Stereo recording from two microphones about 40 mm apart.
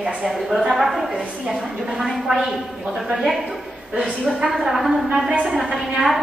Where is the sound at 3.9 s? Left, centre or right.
Right.